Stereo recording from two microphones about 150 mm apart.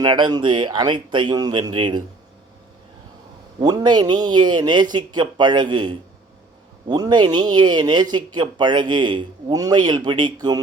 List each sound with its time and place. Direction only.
0.0 s speech: 30° right (ahead or behind)
3.6 s a man's voice: 25° right (ahead or behind)